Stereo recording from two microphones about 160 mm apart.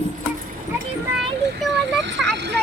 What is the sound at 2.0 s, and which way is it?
Speech, 90° right.